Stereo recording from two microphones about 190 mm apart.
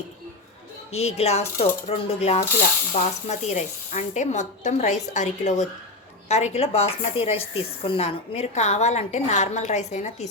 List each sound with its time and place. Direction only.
0.9 s speech: 35° left (ahead or behind)